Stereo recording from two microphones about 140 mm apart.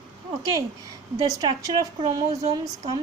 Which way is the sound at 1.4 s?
30° right (ahead or behind).